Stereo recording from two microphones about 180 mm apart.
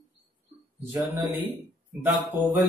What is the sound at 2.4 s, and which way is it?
Mantra, 25° left (ahead or behind).